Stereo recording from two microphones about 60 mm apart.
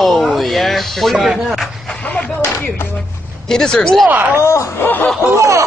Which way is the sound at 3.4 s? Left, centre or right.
Centre.